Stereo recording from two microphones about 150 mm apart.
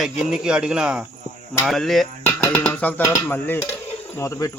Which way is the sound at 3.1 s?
15° left (ahead or behind).